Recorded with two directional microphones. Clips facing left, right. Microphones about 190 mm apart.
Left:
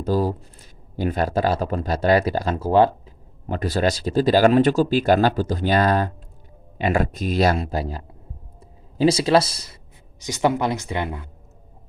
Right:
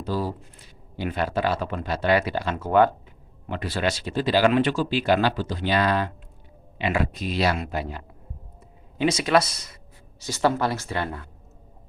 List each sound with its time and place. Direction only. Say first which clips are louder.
0.0 s speech: left 6 dB; 45° left (ahead or behind)
3.4 s speech: left 5 dB; 40° left (ahead or behind)
10.2 s speech: left 2 dB; 15° left (ahead or behind)